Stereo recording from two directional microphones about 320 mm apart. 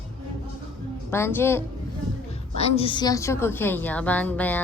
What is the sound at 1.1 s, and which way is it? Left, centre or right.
Speech, centre.